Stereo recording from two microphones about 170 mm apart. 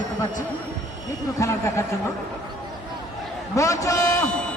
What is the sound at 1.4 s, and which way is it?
Speech, 15° left (ahead or behind).